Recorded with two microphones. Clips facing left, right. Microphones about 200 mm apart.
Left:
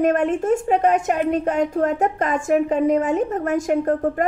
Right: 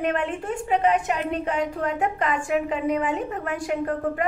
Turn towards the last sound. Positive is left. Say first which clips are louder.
# left 5 dB
turn(degrees=45)  # may be behind; listen again after turning